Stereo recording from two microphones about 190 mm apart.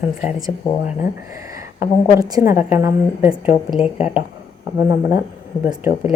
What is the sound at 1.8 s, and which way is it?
A woman's voice, 15° right (ahead or behind).